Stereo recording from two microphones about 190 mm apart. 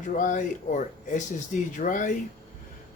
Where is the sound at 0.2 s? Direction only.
40° left (ahead or behind).